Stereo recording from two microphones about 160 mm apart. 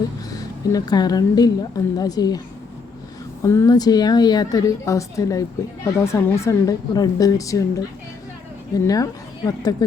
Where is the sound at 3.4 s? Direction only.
20° left (ahead or behind).